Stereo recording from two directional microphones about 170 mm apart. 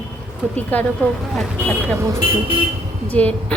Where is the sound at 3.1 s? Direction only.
10° left (ahead or behind).